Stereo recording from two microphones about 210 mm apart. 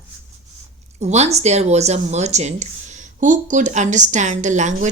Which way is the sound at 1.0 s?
30° right (ahead or behind).